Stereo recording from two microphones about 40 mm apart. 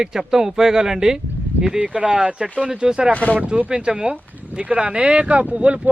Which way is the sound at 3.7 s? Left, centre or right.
Right.